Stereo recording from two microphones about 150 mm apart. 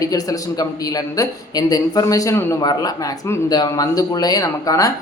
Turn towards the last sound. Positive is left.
turn(degrees=25)  # may be behind; listen again after turning